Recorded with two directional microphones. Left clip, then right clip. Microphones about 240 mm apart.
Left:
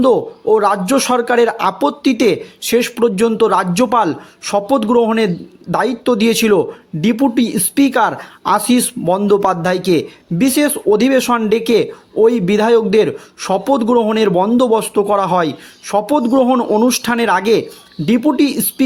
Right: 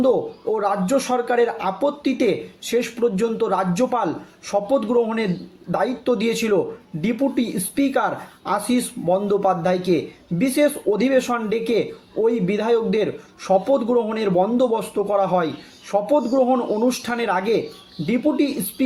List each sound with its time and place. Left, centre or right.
0.0 s speech: left